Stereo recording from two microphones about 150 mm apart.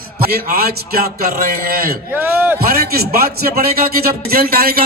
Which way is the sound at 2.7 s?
90° right.